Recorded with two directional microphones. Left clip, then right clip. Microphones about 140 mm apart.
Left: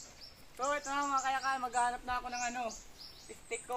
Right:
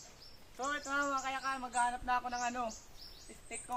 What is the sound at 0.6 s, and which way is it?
Speech, 5° right (ahead or behind).